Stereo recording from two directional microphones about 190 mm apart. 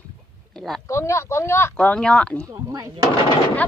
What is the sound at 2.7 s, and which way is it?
Speech, 20° right (ahead or behind).